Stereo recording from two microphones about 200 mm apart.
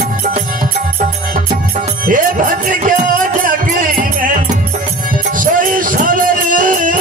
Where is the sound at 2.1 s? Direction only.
40° right (ahead or behind).